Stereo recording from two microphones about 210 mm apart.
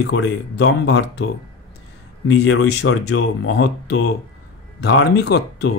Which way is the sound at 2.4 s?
55° left (ahead or behind).